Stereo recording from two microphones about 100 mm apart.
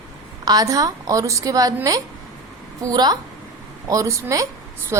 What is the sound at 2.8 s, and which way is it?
A woman's voice, 40° right (ahead or behind).